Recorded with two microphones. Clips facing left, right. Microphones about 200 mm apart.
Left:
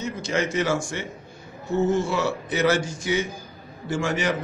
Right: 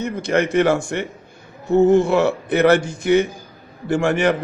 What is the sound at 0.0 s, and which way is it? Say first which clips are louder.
Speech: right 6 dB; 60° right (ahead or behind).